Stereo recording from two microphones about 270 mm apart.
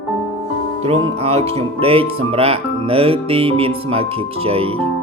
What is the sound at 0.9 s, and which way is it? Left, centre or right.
Speech, right.